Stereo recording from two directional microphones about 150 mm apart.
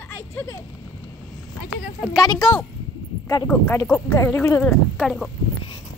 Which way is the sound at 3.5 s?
15° left (ahead or behind).